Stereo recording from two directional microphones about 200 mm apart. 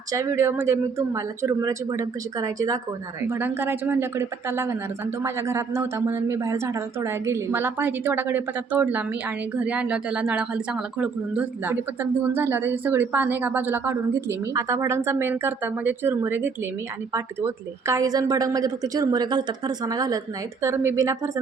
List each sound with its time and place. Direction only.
0.1 s a woman's voice: 15° right (ahead or behind)